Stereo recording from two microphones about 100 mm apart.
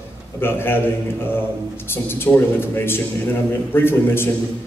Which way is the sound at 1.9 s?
20° left (ahead or behind).